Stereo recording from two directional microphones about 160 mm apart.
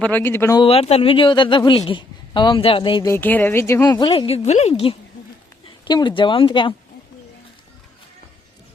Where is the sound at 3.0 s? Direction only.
15° left (ahead or behind); by 6.7 s 30° left (ahead or behind).